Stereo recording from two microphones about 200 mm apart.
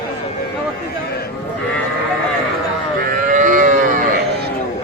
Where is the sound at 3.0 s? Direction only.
45° right (ahead or behind).